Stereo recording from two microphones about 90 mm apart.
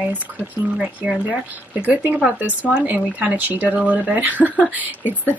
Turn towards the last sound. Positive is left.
turn(degrees=20)  # may be behind; listen again after turning